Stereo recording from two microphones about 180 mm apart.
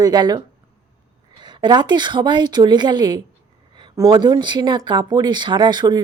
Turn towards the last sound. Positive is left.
turn(degrees=-25)  # may be behind; listen again after turning